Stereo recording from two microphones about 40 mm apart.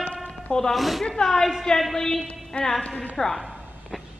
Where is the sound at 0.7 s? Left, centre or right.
Centre.